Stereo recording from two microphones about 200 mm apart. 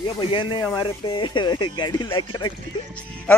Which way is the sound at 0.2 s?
25° left (ahead or behind).